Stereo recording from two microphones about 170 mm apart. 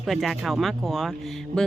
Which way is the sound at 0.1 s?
Centre (ahead or behind).